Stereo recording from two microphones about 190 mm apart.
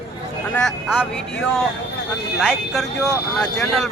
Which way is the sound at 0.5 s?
Centre (ahead or behind).